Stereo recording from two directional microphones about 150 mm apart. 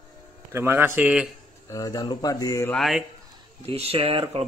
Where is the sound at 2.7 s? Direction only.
Centre (ahead or behind).